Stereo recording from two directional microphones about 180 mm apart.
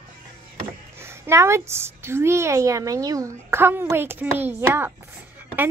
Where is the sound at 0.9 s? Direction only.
15° right (ahead or behind).